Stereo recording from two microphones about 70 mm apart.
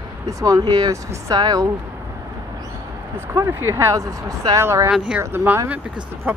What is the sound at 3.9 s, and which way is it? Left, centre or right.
Speech, right.